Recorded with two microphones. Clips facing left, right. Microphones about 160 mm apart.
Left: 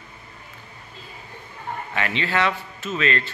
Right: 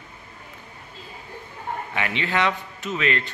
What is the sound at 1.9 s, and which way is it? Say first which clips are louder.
Speech: left 1 dB; 15° right (ahead or behind).